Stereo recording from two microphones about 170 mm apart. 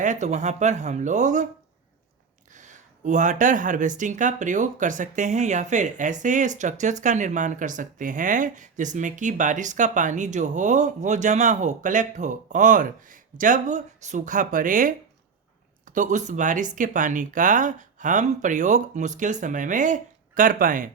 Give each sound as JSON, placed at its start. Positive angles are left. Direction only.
{"t": 0.0, "sound": "speech", "side_deg": -45}
{"t": 2.6, "sound": "speech", "side_deg": -45}
{"t": 16.0, "sound": "speech", "side_deg": -45}